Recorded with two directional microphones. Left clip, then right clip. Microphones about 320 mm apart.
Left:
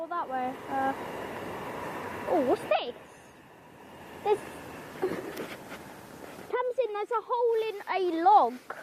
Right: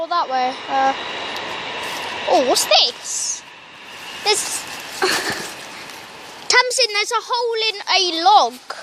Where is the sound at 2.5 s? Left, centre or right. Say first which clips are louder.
Right 12 dB; centre.